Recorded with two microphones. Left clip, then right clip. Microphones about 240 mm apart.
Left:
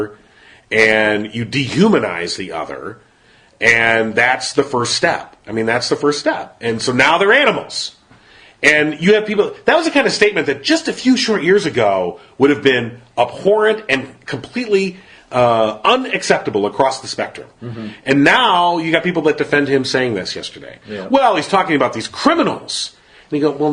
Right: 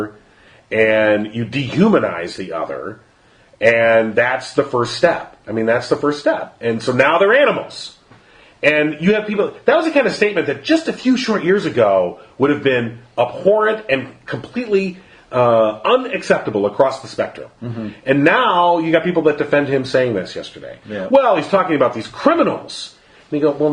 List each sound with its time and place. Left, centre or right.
0.7 s a man's voice: left
3.6 s a man's voice: left
8.6 s a man's voice: left